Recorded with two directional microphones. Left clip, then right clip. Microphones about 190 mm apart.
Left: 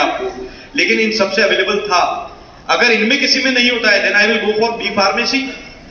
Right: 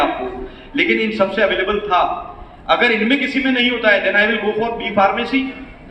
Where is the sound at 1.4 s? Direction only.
45° right (ahead or behind).